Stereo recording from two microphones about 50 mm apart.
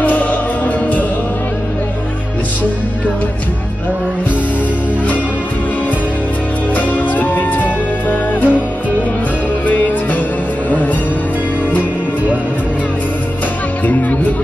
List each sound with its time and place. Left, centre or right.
0.0 s music: left
6.7 s music: left